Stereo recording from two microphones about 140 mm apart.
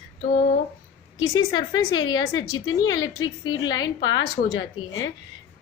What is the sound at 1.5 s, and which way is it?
A woman's voice, 30° left (ahead or behind).